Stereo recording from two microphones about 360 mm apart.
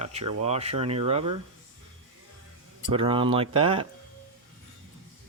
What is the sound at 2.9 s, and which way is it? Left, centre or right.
Speech, centre.